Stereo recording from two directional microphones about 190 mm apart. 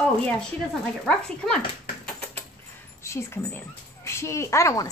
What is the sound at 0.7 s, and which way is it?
Speech, 5° left (ahead or behind).